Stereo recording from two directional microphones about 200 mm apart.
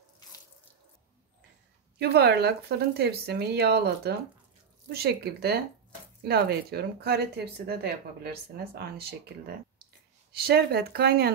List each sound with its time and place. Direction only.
2.0 s speech: 55° right (ahead or behind)